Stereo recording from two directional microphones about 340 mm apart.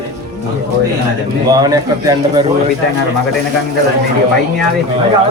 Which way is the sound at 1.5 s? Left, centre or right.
Centre.